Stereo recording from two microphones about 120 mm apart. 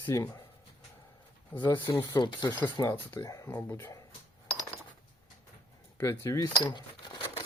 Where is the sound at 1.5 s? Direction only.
15° left (ahead or behind).